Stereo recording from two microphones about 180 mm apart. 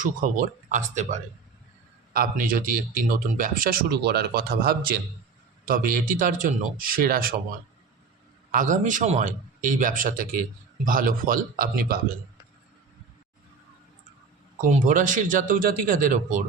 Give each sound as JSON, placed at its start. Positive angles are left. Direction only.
{"t": 0.0, "sound": "speech", "side_deg": -45}
{"t": 8.5, "sound": "speech", "side_deg": -45}
{"t": 14.6, "sound": "speech", "side_deg": -45}